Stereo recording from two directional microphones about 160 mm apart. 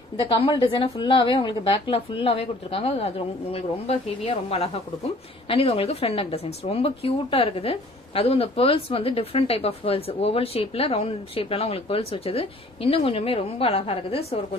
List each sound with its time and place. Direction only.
0.2 s speech: 30° left (ahead or behind)